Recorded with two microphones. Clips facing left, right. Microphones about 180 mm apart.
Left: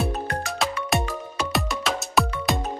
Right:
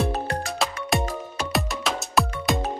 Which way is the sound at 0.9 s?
Centre (ahead or behind).